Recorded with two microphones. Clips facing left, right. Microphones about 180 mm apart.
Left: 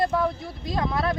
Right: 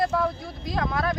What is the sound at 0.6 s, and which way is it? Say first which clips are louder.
Speech: left 1 dB; 25° left (ahead or behind).